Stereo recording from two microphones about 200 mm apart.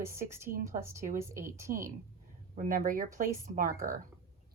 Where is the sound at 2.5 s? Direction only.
40° right (ahead or behind).